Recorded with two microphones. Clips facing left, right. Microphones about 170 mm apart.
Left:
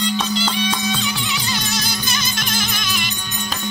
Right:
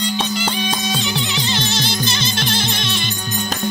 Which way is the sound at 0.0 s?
25° right (ahead or behind).